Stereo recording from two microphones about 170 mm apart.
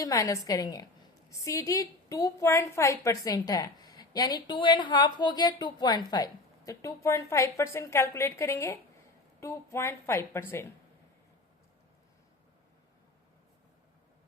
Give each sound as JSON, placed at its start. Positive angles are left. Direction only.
{"t": 0.0, "sound": "a woman's voice", "side_deg": 20}